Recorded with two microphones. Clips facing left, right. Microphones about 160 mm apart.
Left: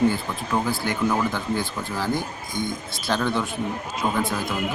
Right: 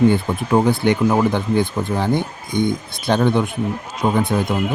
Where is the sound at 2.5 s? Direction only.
60° right (ahead or behind).